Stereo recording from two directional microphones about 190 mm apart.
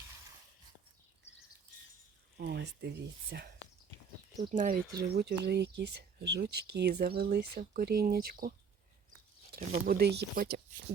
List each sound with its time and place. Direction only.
2.4 s speech: 60° right (ahead or behind)
4.5 s speech: 45° right (ahead or behind)
9.8 s speech: 55° right (ahead or behind)